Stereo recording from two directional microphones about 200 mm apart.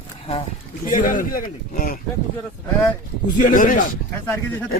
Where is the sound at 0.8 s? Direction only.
40° left (ahead or behind).